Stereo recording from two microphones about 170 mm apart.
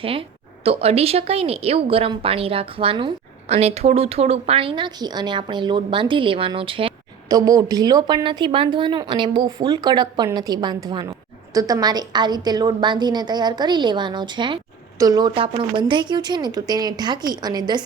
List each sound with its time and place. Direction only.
0.0 s speech: 35° right (ahead or behind)
7.3 s a woman's voice: 20° right (ahead or behind)